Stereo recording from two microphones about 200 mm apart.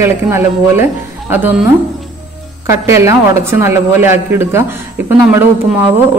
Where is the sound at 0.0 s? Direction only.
10° right (ahead or behind).